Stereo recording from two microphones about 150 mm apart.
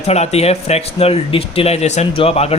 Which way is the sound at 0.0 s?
45° left (ahead or behind).